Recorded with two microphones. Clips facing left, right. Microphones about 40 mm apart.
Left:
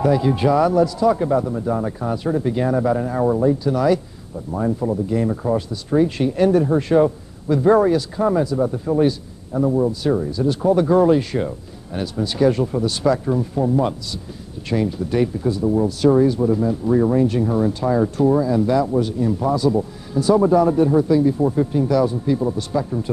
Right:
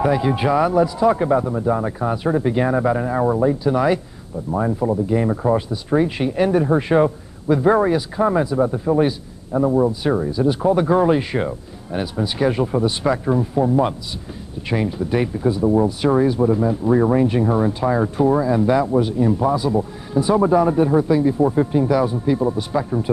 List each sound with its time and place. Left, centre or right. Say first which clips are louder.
0.0 s speech: left 1 dB; centre